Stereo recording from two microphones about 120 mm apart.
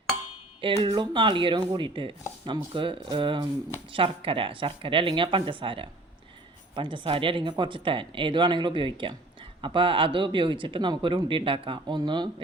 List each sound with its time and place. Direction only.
0.6 s speech: 45° right (ahead or behind)